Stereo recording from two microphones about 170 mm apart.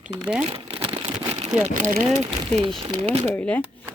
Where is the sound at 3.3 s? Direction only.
10° left (ahead or behind).